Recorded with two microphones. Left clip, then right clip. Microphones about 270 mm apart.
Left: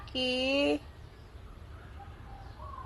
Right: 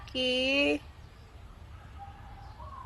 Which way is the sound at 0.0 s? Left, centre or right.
Centre.